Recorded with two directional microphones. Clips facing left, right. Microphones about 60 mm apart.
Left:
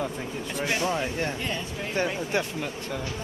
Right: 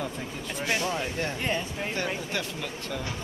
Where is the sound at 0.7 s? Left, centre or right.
Left.